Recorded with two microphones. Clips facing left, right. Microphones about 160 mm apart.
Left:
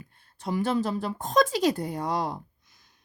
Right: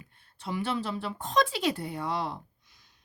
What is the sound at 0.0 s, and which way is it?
A woman's voice, 45° left (ahead or behind).